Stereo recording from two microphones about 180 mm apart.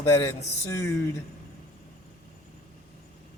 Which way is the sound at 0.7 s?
15° left (ahead or behind).